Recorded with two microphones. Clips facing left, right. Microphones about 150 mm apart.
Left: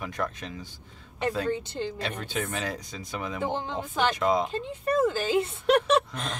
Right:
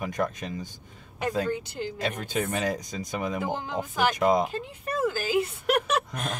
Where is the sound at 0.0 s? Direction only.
45° right (ahead or behind).